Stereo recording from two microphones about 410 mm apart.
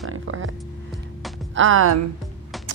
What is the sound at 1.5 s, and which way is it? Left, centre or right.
Speech, right.